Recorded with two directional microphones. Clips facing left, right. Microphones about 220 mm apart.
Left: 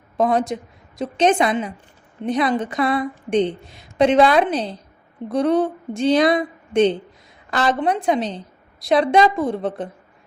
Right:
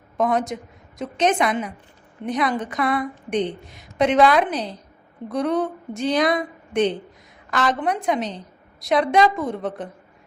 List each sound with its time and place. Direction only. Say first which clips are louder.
0.2 s a woman's voice: left 3 dB; 30° left (ahead or behind)